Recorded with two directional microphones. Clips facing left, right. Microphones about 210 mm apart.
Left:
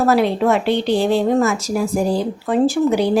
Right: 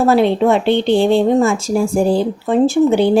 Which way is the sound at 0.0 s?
25° right (ahead or behind).